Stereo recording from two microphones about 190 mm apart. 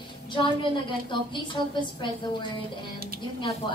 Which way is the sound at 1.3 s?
25° left (ahead or behind).